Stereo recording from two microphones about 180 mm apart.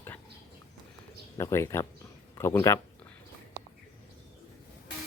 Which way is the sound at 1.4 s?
15° left (ahead or behind).